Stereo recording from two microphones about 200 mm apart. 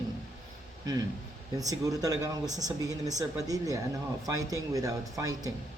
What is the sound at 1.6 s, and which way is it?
A woman's voice, 15° right (ahead or behind).